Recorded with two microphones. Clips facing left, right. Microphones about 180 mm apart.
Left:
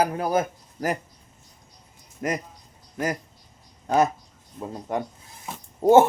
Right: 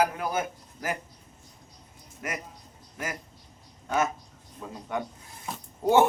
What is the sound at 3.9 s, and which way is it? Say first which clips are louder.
A man's voice: left 6 dB; 35° left (ahead or behind).